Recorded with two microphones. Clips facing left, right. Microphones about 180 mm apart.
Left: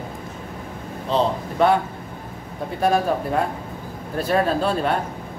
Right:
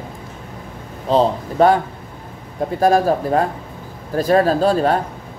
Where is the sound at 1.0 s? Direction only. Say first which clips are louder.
Right 5 dB; 40° right (ahead or behind).